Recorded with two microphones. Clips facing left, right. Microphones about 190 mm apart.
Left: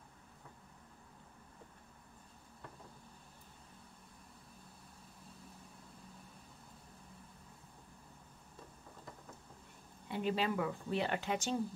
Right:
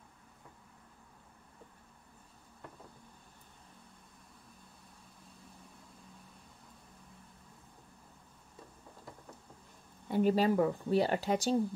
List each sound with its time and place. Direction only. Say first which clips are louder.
10.0 s speech: right 8 dB; 45° right (ahead or behind)